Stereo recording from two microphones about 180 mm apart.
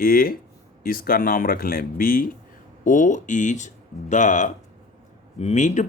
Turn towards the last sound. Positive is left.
turn(degrees=40)  # may be behind; listen again after turning